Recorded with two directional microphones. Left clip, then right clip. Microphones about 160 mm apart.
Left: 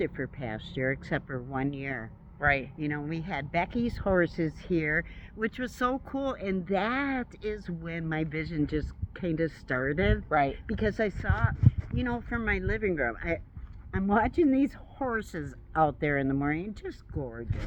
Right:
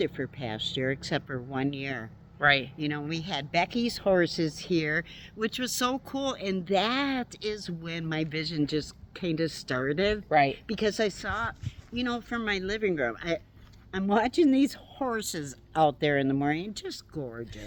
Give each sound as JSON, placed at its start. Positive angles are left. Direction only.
{"t": 0.0, "sound": "speech", "side_deg": -30}